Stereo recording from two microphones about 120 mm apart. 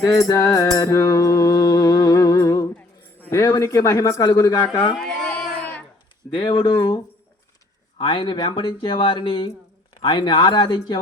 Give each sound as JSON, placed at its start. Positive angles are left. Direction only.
{"t": 0.0, "sound": "a man's voice", "side_deg": 25}
{"t": 0.8, "sound": "music", "side_deg": 30}
{"t": 3.2, "sound": "keys jangling", "side_deg": 20}
{"t": 3.4, "sound": "a man's voice", "side_deg": 25}
{"t": 4.9, "sound": "a sound", "side_deg": 5}
{"t": 6.3, "sound": "speech", "side_deg": 45}
{"t": 7.9, "sound": "speech", "side_deg": 45}